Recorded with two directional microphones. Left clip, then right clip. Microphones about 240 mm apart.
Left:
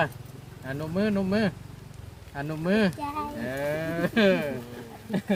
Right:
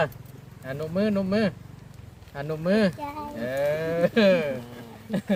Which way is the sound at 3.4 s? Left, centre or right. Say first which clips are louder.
Right 6 dB; right.